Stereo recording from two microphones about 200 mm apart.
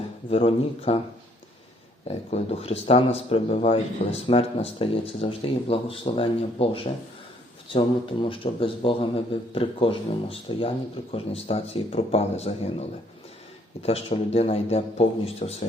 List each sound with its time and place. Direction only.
0.3 s a man's voice: 30° left (ahead or behind)
2.0 s a man's voice: 30° left (ahead or behind)
13.8 s a man's voice: 30° left (ahead or behind)